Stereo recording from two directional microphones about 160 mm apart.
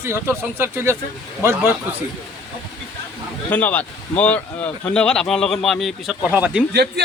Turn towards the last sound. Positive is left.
turn(degrees=-90)